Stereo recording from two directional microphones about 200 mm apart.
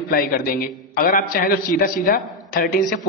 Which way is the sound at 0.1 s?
45° left (ahead or behind).